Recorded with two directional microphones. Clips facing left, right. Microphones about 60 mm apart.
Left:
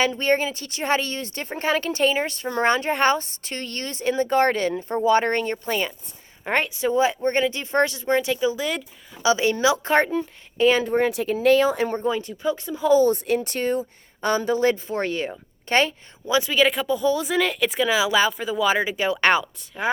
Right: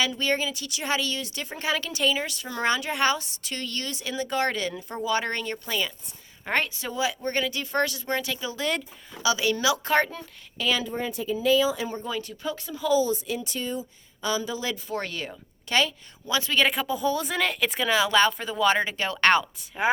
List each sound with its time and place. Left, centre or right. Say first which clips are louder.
0.0 s speech: left 5 dB; left
6.4 s speech: left 4 dB; centre
6.9 s speech: left 6 dB; left
10.6 s speech: left 8 dB; left
10.9 s speech: left 8 dB; left
12.0 s speech: left 7 dB; left
12.9 s speech: left 6 dB; left
14.8 s speech: left 6 dB; left
16.2 s speech: left 5 dB; centre
16.6 s speech: left 1 dB; centre
19.5 s speech: right 1 dB; centre